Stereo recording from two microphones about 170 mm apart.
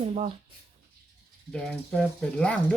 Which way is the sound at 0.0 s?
40° right (ahead or behind).